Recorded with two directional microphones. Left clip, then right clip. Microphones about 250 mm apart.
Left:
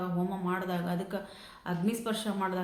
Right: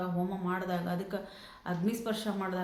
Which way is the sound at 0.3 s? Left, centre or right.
Centre.